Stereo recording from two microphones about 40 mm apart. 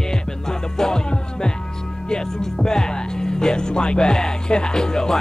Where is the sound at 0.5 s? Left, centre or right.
Centre.